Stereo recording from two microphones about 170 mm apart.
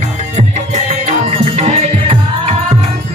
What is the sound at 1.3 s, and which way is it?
Music, 40° right (ahead or behind).